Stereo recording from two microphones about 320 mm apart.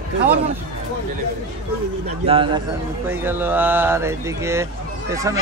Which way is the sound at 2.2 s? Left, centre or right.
Centre.